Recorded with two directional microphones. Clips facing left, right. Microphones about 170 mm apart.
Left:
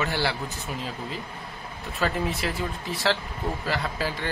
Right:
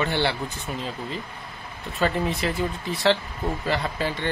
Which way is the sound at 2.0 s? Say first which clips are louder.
Right 3 dB; 5° left (ahead or behind).